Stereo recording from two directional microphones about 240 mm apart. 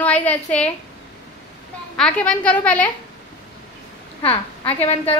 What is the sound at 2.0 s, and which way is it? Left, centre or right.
Speech, centre.